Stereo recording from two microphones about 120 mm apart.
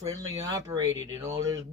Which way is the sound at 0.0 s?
30° right (ahead or behind).